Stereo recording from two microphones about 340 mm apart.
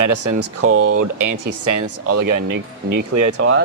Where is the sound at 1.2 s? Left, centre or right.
Right.